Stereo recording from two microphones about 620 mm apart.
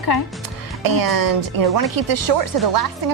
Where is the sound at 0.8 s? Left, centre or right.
Right.